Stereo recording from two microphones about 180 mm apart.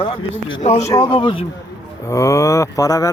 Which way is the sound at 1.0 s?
30° left (ahead or behind).